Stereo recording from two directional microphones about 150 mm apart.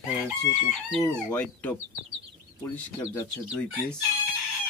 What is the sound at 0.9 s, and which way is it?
Speech, 10° left (ahead or behind).